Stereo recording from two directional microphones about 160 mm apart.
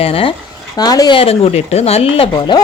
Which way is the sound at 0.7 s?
25° left (ahead or behind).